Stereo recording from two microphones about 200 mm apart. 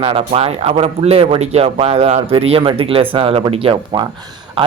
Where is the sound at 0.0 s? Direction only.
30° right (ahead or behind).